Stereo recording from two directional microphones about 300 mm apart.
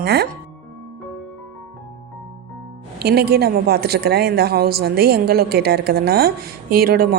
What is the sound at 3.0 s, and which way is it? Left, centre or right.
A woman's voice, right.